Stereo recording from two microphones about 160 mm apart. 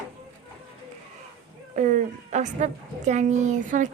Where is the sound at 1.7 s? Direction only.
50° right (ahead or behind).